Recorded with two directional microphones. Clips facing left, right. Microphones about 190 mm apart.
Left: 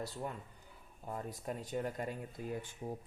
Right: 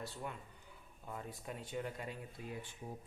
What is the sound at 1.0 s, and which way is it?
Speech, 40° left (ahead or behind).